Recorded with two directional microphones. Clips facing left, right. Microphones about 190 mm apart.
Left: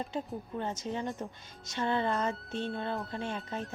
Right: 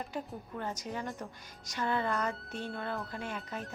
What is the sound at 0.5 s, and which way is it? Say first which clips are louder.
Speech: left 3 dB; 25° left (ahead or behind).